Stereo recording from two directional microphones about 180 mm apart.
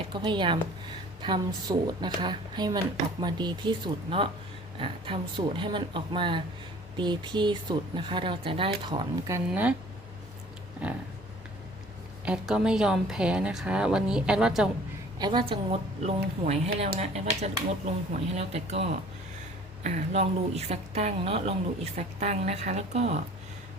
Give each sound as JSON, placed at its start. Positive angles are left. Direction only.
{"t": 0.1, "sound": "speech", "side_deg": -25}
{"t": 9.5, "sound": "speech", "side_deg": -5}
{"t": 10.8, "sound": "speech", "side_deg": -5}
{"t": 12.2, "sound": "a woman's voice", "side_deg": -5}
{"t": 15.2, "sound": "speech", "side_deg": -25}